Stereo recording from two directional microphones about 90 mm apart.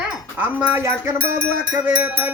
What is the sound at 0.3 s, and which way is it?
Speech, 20° right (ahead or behind).